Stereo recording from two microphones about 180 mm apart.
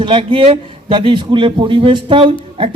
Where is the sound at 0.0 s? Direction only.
30° right (ahead or behind).